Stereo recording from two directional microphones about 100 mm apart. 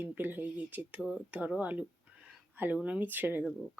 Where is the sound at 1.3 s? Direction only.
15° right (ahead or behind).